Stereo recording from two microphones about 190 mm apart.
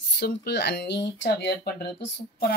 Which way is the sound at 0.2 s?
60° left (ahead or behind).